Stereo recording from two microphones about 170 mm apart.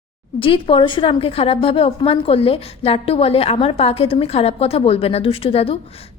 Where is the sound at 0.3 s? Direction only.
30° left (ahead or behind).